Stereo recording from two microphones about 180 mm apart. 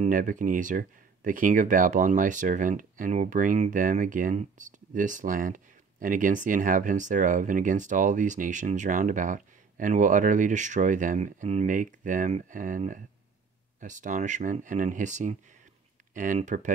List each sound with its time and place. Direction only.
0.0 s speech: 45° right (ahead or behind)